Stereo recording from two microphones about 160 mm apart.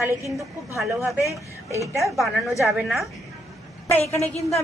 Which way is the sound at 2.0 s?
Centre (ahead or behind).